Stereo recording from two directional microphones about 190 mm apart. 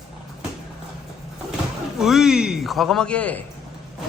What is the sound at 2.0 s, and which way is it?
A man's voice, centre (ahead or behind).